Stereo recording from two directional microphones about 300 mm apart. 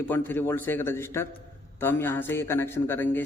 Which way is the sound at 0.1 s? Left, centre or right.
Centre.